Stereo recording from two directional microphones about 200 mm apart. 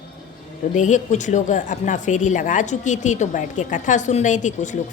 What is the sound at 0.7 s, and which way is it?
A woman's voice, 35° left (ahead or behind).